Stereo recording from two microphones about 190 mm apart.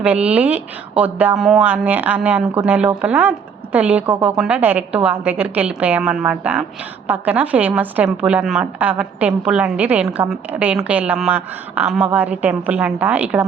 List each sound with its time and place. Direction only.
0.0 s a woman's voice: 5° right (ahead or behind)